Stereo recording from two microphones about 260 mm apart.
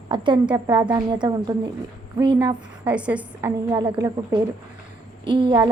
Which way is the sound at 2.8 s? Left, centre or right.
Centre.